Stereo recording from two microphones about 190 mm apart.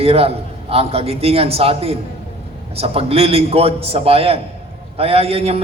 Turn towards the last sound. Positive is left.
turn(degrees=-30)  # may be behind; listen again after turning